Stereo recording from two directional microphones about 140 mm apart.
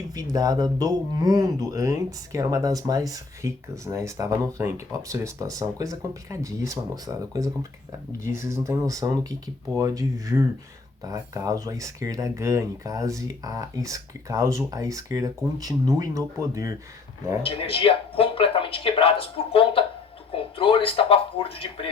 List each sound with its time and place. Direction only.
0.1 s speech: 25° right (ahead or behind)
17.4 s speech: 40° left (ahead or behind)